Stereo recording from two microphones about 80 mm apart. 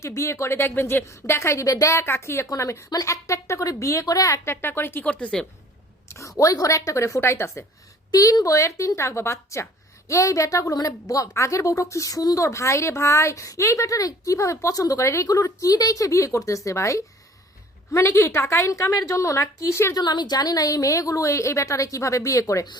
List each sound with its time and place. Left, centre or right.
0.0 s a woman's voice: left
4.4 s speech: left
5.0 s a woman's voice: centre
6.1 s a woman's voice: left
8.1 s a woman's voice: left
20.0 s a woman's voice: left